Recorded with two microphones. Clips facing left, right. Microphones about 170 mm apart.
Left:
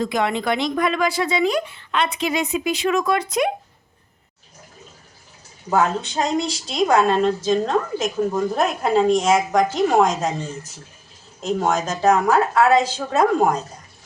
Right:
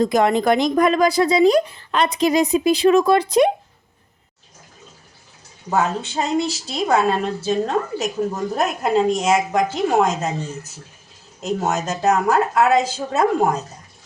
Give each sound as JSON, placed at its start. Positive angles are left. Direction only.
{"t": 0.0, "sound": "speech", "side_deg": -45}
{"t": 5.7, "sound": "a woman's voice", "side_deg": -5}
{"t": 11.3, "sound": "a woman's voice", "side_deg": -5}